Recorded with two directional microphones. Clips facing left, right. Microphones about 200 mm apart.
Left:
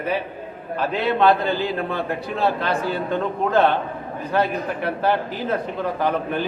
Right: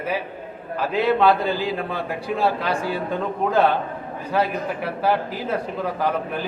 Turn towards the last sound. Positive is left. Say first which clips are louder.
# left 2 dB
turn(degrees=-5)  # may be behind; listen again after turning